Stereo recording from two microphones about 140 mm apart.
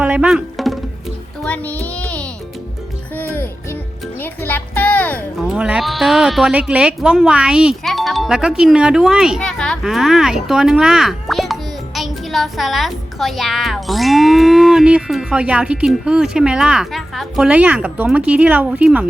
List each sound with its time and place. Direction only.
0.0 s music: 10° right (ahead or behind)
1.5 s music: 10° left (ahead or behind)
3.3 s music: 15° left (ahead or behind)
4.2 s a sound: 15° left (ahead or behind)
5.4 s speech: 5° right (ahead or behind)